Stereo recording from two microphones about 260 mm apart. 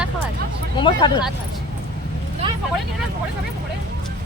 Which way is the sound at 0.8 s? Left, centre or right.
Centre.